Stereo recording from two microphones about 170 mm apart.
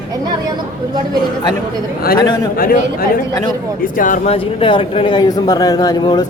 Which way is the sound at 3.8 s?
50° left (ahead or behind).